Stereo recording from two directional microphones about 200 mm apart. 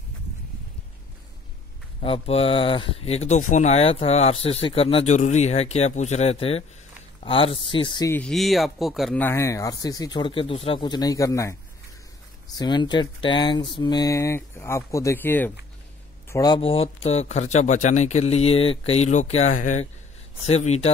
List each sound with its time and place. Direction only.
2.0 s speech: 30° left (ahead or behind)
8.1 s speech: 5° left (ahead or behind)
12.5 s speech: 20° left (ahead or behind)